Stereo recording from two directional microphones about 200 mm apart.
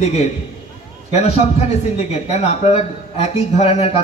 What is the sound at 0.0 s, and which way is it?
A man's voice, 35° left (ahead or behind).